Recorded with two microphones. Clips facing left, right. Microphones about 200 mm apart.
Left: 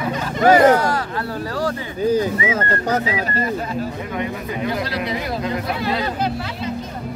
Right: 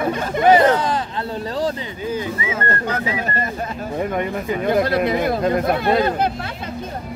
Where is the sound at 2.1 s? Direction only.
40° left (ahead or behind).